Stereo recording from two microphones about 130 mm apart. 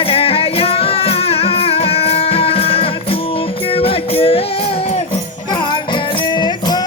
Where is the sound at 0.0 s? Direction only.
45° left (ahead or behind).